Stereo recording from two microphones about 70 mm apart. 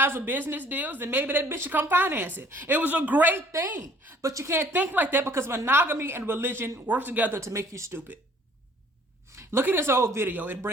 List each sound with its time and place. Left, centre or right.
0.0 s a woman's voice: right
3.5 s speech: right
4.5 s a woman's voice: right
5.3 s a woman's voice: right
7.3 s speech: right
7.9 s a woman's voice: right
9.3 s speech: right
10.2 s a woman's voice: right